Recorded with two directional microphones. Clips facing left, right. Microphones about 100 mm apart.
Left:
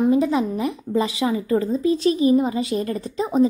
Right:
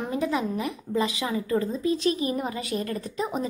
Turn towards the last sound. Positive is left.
turn(degrees=30)  # may be behind; listen again after turning